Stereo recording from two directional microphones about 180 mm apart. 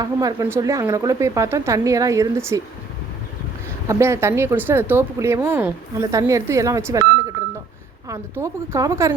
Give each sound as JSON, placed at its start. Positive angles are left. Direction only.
{"t": 0.0, "sound": "speech", "side_deg": -20}
{"t": 3.8, "sound": "speech", "side_deg": -15}